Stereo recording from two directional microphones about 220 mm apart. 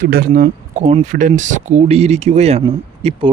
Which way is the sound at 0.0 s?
40° right (ahead or behind).